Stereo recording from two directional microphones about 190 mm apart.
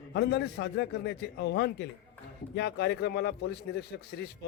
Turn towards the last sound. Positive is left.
turn(degrees=60)  # may be behind; listen again after turning